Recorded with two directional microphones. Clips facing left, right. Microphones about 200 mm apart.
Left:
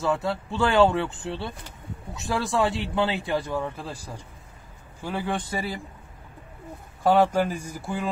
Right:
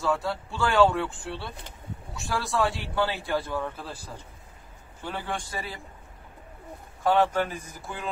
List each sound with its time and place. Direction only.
0.0 s speech: 25° left (ahead or behind)
2.6 s a man's voice: centre (ahead or behind)
2.9 s speech: 20° left (ahead or behind)
5.0 s speech: 10° left (ahead or behind)
5.5 s speech: 30° left (ahead or behind)
7.1 s speech: 10° left (ahead or behind)
7.5 s speech: 30° left (ahead or behind)